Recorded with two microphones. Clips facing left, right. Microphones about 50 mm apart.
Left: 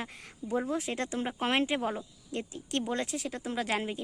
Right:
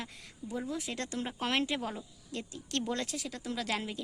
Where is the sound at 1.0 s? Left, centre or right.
Left.